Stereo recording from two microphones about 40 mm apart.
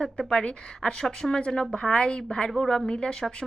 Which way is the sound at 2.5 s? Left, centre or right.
Centre.